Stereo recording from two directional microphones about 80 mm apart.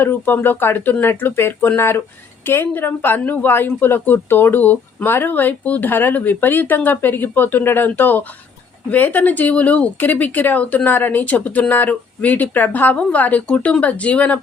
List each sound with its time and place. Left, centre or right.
0.0 s speech: left